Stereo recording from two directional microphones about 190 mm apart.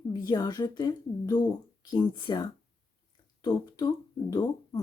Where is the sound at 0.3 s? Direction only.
20° left (ahead or behind).